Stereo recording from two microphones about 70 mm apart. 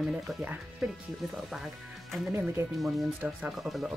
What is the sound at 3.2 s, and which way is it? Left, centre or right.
Speech, right.